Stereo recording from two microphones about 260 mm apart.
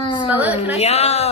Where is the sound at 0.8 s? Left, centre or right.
Left.